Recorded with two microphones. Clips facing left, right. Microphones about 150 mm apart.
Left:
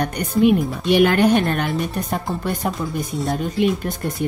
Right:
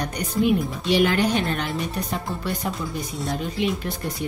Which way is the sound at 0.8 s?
55° left (ahead or behind).